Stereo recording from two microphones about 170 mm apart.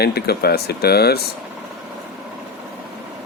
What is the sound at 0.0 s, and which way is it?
Speech, 70° left (ahead or behind).